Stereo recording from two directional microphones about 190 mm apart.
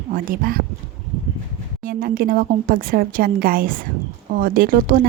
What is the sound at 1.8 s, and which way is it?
A woman's voice, 50° right (ahead or behind).